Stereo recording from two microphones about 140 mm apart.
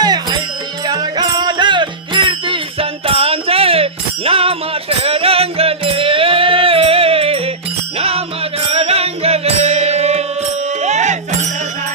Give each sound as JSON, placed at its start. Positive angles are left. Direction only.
{"t": 0.0, "sound": "music", "side_deg": -30}
{"t": 8.6, "sound": "music", "side_deg": -45}